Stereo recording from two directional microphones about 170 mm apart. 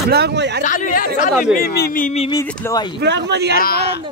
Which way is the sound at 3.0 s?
80° right.